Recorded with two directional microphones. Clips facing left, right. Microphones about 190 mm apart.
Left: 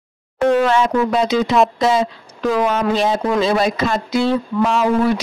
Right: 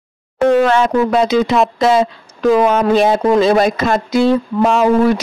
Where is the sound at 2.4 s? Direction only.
50° right (ahead or behind).